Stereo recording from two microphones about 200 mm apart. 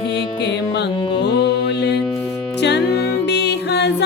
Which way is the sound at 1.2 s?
55° left (ahead or behind).